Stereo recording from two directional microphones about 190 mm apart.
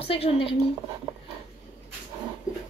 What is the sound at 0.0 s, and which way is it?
Speech, 30° left (ahead or behind).